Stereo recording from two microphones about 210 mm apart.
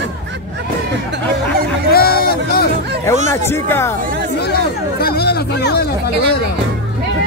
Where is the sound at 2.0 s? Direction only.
45° left (ahead or behind).